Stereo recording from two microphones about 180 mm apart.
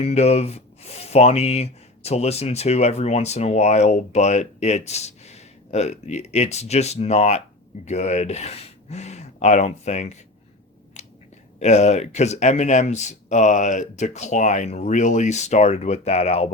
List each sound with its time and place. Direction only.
0.0 s speech: 35° left (ahead or behind)
11.0 s a sound: 40° left (ahead or behind)
11.6 s speech: 40° left (ahead or behind)